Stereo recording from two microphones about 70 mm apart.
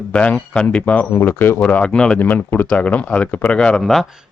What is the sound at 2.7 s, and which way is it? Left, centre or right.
Speech, centre.